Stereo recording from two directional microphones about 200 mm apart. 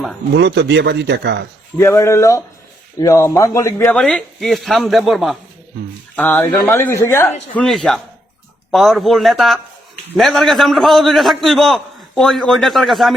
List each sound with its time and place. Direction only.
0.3 s speech: 60° right (ahead or behind)
1.8 s a man's voice: 15° left (ahead or behind)